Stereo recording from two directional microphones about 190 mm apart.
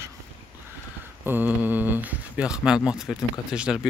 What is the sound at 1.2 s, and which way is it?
Speech, 10° right (ahead or behind).